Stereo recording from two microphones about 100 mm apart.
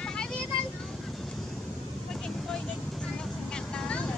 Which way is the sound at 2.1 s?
5° left (ahead or behind).